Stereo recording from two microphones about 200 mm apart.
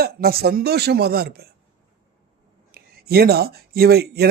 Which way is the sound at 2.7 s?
50° right (ahead or behind).